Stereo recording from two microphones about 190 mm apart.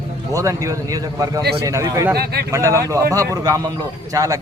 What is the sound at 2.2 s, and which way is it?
Speech, 55° right (ahead or behind).